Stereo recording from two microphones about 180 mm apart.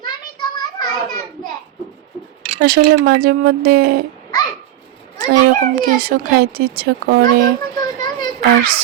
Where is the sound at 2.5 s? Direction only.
60° right (ahead or behind).